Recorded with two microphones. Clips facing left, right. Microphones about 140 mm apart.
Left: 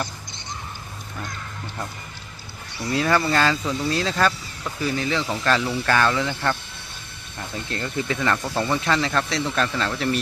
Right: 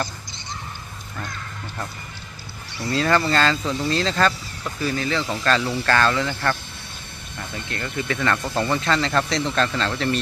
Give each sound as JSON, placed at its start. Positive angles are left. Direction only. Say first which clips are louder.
{"t": 2.9, "sound": "speech", "louder": "right 1 dB", "side_deg": 10}
{"t": 4.8, "sound": "speech", "louder": "even", "side_deg": 15}
{"t": 7.7, "sound": "speech", "louder": "left 1 dB", "side_deg": 20}